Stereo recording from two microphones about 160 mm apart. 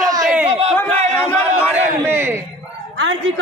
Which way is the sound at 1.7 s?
15° right (ahead or behind).